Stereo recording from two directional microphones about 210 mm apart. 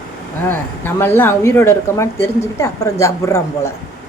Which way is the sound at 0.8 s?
10° left (ahead or behind).